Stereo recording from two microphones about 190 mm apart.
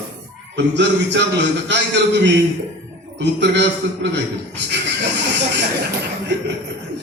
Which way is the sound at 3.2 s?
65° right (ahead or behind).